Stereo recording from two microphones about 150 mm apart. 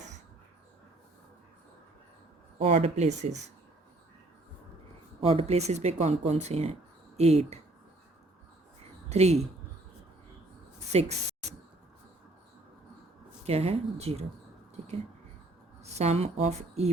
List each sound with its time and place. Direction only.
2.6 s speech: 40° right (ahead or behind)
5.2 s speech: 40° right (ahead or behind)
9.0 s speech: 45° right (ahead or behind)
10.9 s speech: 45° right (ahead or behind)
13.4 s speech: 40° right (ahead or behind)
15.8 s a woman's voice: 45° right (ahead or behind)